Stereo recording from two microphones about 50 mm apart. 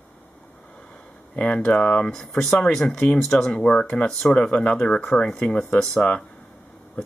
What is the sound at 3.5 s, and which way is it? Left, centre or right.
Speech, left.